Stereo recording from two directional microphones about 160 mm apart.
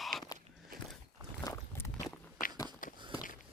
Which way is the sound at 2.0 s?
60° left (ahead or behind).